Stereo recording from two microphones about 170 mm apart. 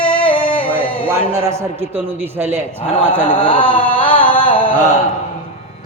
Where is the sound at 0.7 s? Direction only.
30° left (ahead or behind).